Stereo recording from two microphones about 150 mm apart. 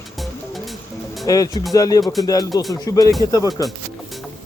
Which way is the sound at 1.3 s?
25° left (ahead or behind).